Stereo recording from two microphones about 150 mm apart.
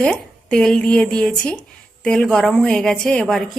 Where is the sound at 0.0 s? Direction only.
5° left (ahead or behind).